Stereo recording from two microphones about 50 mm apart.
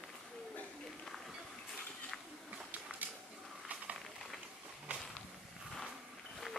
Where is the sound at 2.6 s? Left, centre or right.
Right.